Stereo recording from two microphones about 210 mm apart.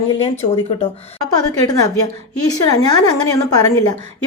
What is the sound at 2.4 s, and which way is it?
A woman's voice, 15° left (ahead or behind).